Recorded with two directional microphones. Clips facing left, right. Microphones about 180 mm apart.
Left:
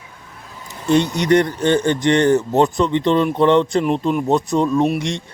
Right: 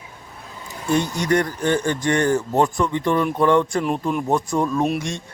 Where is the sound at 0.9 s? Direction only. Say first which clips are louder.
Left 5 dB; 20° left (ahead or behind).